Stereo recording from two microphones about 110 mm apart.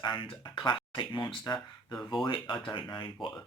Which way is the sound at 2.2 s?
45° left (ahead or behind).